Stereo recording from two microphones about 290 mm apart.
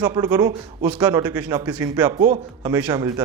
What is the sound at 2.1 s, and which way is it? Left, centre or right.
Speech, right.